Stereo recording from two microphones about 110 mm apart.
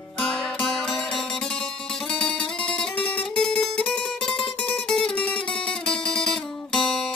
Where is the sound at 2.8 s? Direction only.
10° left (ahead or behind).